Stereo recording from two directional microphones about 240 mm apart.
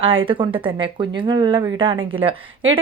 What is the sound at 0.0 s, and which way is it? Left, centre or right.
A woman's voice, right.